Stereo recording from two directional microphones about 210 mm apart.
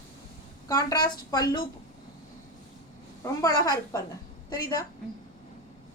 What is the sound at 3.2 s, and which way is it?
A woman's voice, 15° left (ahead or behind).